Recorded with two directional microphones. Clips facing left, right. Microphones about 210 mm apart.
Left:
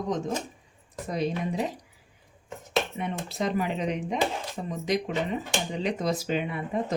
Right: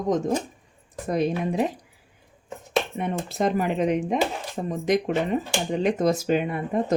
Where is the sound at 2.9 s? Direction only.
50° right (ahead or behind).